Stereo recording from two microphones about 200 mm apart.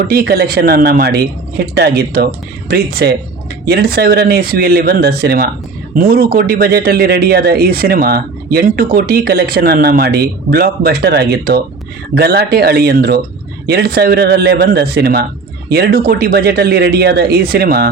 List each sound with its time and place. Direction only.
0.1 s speech: 50° right (ahead or behind)